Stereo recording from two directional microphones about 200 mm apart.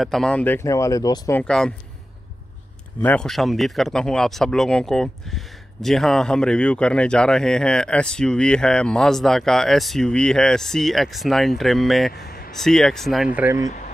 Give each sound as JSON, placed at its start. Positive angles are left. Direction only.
{"t": 0.0, "sound": "speech", "side_deg": 0}
{"t": 1.4, "sound": "speech", "side_deg": 5}
{"t": 3.0, "sound": "speech", "side_deg": 5}
{"t": 12.1, "sound": "a sound", "side_deg": 50}
{"t": 12.5, "sound": "speech", "side_deg": 5}